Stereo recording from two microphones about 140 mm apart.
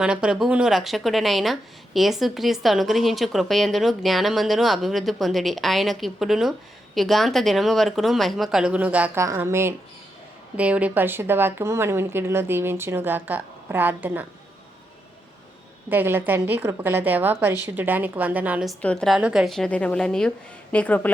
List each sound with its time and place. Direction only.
0.0 s a woman's voice: 5° right (ahead or behind)
15.9 s speech: 15° right (ahead or behind)
18.8 s a woman's voice: 5° left (ahead or behind)